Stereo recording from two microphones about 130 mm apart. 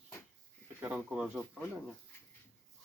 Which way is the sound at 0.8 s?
10° right (ahead or behind).